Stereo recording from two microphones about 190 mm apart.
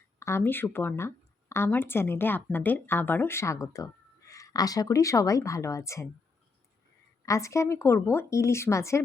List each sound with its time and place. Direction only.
0.2 s speech: 15° left (ahead or behind)
7.3 s speech: 15° left (ahead or behind)